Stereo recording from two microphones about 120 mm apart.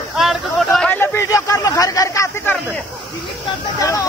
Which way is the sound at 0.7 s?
10° left (ahead or behind).